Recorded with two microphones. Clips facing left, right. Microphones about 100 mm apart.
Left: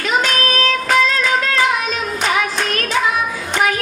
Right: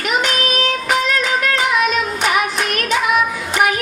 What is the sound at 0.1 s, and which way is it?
Child singing, 30° left (ahead or behind).